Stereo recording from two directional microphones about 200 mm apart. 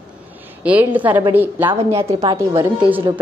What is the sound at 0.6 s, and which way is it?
A woman's voice, 10° right (ahead or behind).